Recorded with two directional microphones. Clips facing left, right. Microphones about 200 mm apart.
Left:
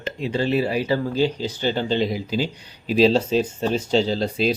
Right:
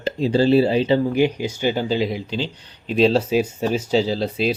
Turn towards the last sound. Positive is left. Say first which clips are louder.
# even
turn(degrees=0)  # may be behind; listen again after turning